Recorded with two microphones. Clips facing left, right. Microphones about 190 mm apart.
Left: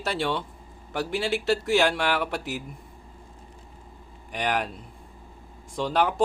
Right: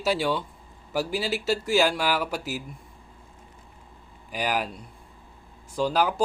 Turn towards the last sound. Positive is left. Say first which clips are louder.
# even
turn(degrees=0)  # may be behind; listen again after turning